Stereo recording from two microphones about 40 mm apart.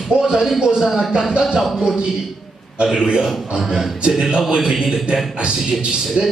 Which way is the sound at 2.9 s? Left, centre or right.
Centre.